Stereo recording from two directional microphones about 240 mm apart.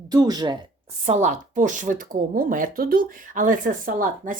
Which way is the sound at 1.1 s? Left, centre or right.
Right.